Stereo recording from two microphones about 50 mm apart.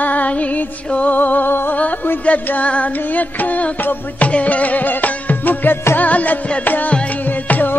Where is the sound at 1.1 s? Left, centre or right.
Left.